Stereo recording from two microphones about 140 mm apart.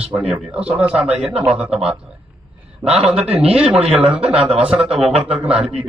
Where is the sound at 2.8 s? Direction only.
20° right (ahead or behind).